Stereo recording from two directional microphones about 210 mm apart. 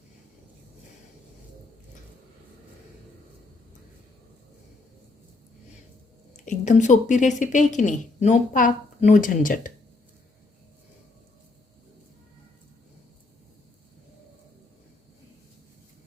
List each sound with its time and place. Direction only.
6.3 s a woman's voice: 35° left (ahead or behind)